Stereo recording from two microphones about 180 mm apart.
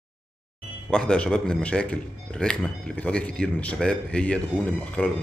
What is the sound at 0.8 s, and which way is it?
A man's voice, 5° left (ahead or behind).